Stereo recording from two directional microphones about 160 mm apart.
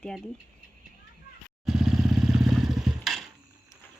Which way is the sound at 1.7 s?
5° right (ahead or behind).